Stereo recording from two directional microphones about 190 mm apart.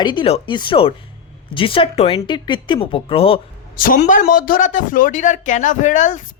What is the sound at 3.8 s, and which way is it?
Speech, 45° left (ahead or behind).